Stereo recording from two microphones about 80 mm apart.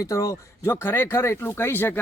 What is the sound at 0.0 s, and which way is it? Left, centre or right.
Speech, left.